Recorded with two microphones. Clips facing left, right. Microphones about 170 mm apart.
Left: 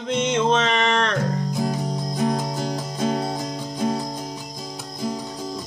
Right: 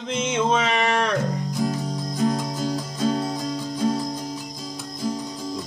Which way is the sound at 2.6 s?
55° left (ahead or behind).